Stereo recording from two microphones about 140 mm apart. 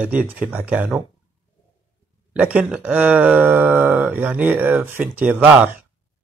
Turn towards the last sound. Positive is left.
turn(degrees=-10)  # may be behind; listen again after turning